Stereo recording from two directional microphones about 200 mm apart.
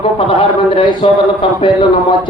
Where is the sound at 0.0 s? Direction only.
25° left (ahead or behind).